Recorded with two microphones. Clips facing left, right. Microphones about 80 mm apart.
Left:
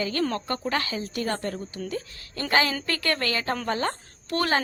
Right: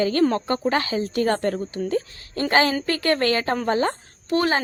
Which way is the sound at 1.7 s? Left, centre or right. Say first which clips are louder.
Right 8 dB; right.